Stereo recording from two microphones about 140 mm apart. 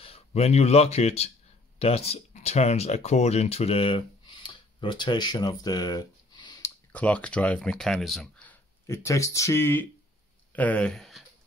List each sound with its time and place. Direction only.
0.0 s speech: 45° left (ahead or behind); by 6.7 s 30° left (ahead or behind)
6.9 s speech: 10° left (ahead or behind)
8.8 s speech: 20° left (ahead or behind); by 11.2 s centre (ahead or behind)